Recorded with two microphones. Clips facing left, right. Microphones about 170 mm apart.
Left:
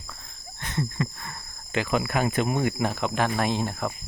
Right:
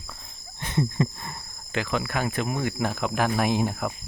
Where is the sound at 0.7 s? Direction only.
20° right (ahead or behind).